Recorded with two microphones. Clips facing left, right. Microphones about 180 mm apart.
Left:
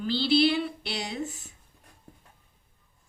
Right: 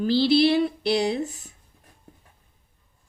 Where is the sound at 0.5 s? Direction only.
40° right (ahead or behind).